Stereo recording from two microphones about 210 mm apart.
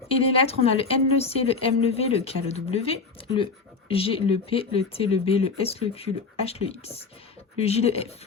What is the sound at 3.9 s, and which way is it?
Speech, 25° left (ahead or behind).